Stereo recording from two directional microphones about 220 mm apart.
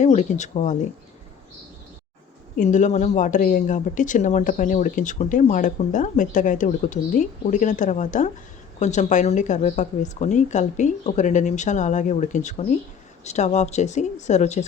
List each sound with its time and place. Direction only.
0.0 s speech: 35° left (ahead or behind)
2.6 s speech: 35° left (ahead or behind)